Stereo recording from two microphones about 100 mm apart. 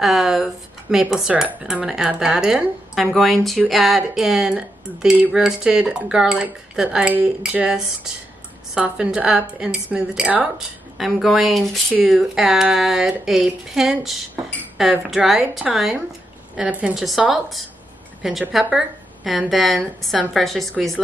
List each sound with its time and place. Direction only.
0.0 s speech: 5° right (ahead or behind)
8.7 s speech: 10° right (ahead or behind)
11.0 s speech: centre (ahead or behind)